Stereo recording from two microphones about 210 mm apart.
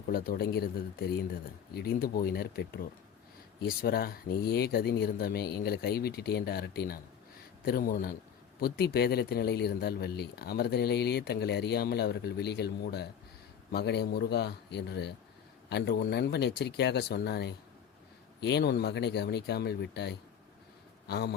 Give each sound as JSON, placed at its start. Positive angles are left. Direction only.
{"t": 0.1, "sound": "speech", "side_deg": 45}